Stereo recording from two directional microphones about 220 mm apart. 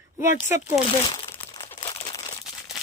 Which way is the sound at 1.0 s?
20° left (ahead or behind).